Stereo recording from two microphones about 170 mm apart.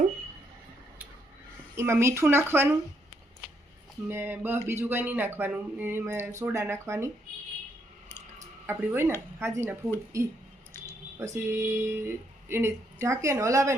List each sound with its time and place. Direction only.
1.7 s speech: 15° right (ahead or behind)
4.1 s speech: 10° right (ahead or behind)
8.6 s speech: 15° right (ahead or behind)